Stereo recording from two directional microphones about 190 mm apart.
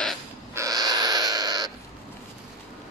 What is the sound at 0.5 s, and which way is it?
Crow, 20° right (ahead or behind).